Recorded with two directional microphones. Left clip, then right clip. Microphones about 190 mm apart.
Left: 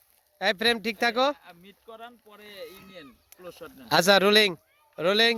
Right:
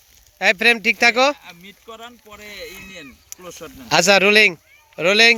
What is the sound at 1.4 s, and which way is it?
Speech, 20° right (ahead or behind).